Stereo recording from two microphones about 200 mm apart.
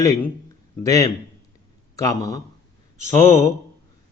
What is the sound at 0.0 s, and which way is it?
Speech, 15° left (ahead or behind).